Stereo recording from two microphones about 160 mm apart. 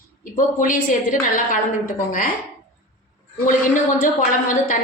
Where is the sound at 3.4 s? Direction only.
55° left (ahead or behind).